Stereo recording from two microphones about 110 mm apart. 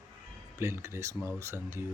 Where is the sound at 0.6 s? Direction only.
25° right (ahead or behind).